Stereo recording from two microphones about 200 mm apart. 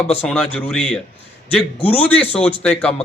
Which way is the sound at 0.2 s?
5° left (ahead or behind).